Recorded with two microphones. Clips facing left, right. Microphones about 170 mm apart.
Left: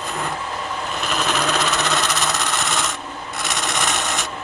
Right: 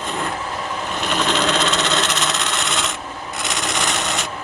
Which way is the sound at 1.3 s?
20° right (ahead or behind).